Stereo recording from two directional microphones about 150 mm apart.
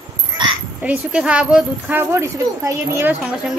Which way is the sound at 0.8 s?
10° right (ahead or behind).